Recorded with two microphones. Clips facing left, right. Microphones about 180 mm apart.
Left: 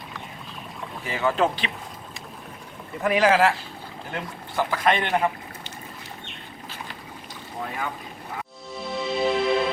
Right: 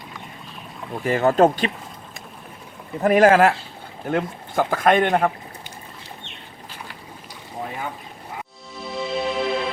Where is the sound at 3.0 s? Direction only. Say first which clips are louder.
Right 5 dB; 50° right (ahead or behind).